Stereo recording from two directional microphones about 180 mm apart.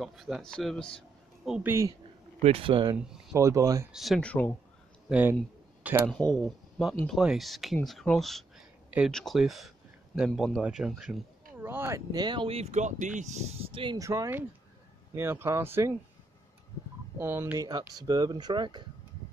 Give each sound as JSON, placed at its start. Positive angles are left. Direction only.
{"t": 0.0, "sound": "speech", "side_deg": 0}
{"t": 1.7, "sound": "speech", "side_deg": -15}
{"t": 2.4, "sound": "speech", "side_deg": -30}
{"t": 3.3, "sound": "speech", "side_deg": -15}
{"t": 3.9, "sound": "speech", "side_deg": 0}
{"t": 5.1, "sound": "speech", "side_deg": -10}
{"t": 6.0, "sound": "speech", "side_deg": 5}
{"t": 17.2, "sound": "speech", "side_deg": -15}